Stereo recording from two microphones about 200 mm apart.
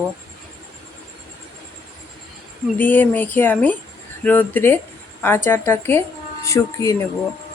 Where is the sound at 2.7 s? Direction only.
10° left (ahead or behind).